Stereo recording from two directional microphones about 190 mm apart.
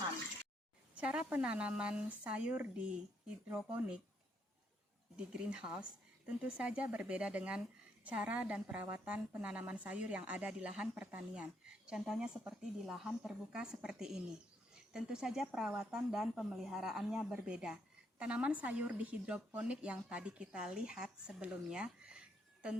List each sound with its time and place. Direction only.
0.9 s speech: 5° right (ahead or behind)
5.1 s a woman's voice: 5° right (ahead or behind)